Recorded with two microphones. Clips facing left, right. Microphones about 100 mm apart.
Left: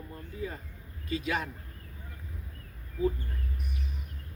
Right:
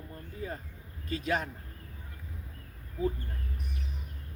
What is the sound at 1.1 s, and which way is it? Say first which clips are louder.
Speech: even; 40° right (ahead or behind).